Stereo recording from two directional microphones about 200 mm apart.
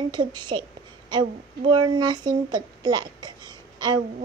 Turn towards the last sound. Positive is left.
turn(degrees=-20)  # may be behind; listen again after turning